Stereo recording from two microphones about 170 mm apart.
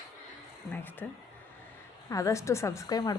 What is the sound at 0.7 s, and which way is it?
Speech, 10° left (ahead or behind).